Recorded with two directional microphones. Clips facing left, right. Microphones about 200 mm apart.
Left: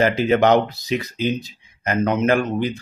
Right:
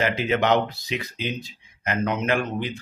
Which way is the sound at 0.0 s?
40° left (ahead or behind).